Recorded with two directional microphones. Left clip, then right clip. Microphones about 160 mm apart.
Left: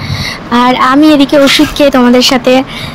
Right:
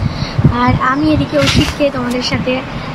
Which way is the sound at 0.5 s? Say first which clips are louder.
Left 8 dB; 60° left (ahead or behind).